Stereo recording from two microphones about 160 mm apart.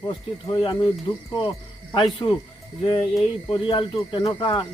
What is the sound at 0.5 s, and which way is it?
Speech, 30° left (ahead or behind).